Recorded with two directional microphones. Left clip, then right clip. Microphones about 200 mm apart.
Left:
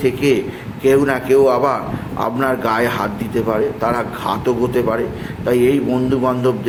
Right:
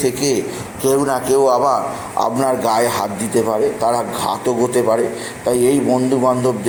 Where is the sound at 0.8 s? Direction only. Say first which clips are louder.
Left 2 dB; 25° left (ahead or behind).